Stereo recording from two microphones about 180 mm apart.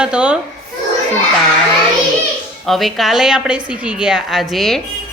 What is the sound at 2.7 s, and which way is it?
A woman's voice, centre (ahead or behind).